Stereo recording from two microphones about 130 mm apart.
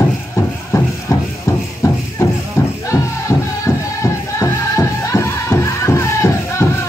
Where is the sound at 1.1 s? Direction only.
25° left (ahead or behind).